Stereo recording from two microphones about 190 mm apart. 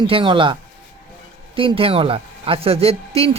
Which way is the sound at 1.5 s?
30° right (ahead or behind).